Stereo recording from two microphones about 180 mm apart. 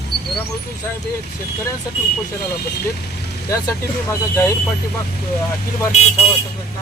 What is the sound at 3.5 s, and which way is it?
Speech, 20° left (ahead or behind).